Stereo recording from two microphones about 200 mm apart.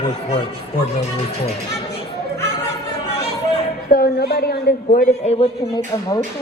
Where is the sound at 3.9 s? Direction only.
50° left (ahead or behind).